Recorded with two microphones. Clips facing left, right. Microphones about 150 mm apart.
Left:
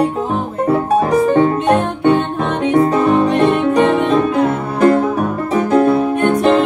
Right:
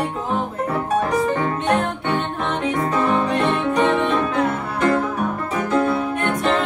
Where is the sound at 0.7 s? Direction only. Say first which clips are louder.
Left 8 dB; 30° left (ahead or behind).